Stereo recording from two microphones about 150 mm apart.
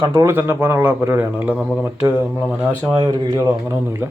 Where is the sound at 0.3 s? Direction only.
15° right (ahead or behind).